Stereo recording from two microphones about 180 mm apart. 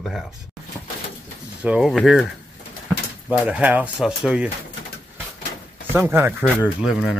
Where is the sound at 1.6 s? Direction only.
Centre (ahead or behind).